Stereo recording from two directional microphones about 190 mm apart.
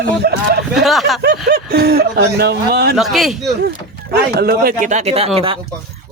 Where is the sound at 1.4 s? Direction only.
55° right (ahead or behind).